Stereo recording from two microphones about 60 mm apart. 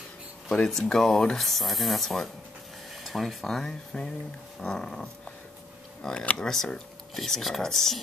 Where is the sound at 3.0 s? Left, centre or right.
Centre.